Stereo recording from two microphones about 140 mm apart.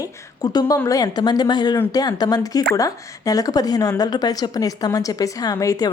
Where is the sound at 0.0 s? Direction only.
30° left (ahead or behind).